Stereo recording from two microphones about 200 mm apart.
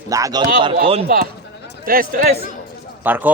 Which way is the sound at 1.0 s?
50° right (ahead or behind).